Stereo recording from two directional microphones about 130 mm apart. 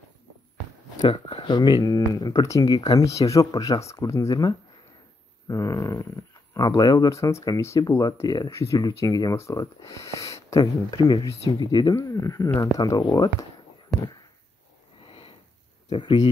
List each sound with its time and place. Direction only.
1.0 s speech: 40° left (ahead or behind)
15.0 s sniff: 45° left (ahead or behind)
15.9 s speech: 35° left (ahead or behind)